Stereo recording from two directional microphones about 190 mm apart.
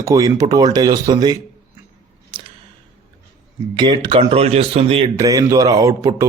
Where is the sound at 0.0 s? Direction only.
20° right (ahead or behind).